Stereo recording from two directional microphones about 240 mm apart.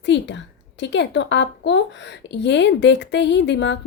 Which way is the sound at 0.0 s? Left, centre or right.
Left.